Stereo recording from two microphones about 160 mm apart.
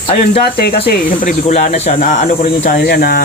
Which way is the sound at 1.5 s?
45° left (ahead or behind).